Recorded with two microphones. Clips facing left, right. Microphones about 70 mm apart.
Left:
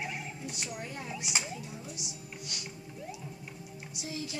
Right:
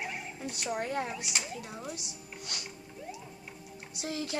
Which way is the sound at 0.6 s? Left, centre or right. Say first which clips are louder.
Right 11 dB; right.